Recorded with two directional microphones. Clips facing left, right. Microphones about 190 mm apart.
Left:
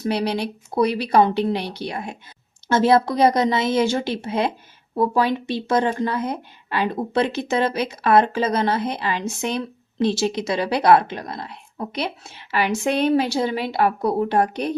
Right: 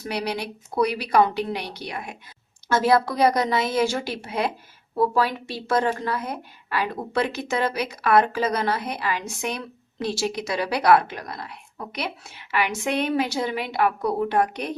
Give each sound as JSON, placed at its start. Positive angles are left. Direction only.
{"t": 0.0, "sound": "a woman's voice", "side_deg": 25}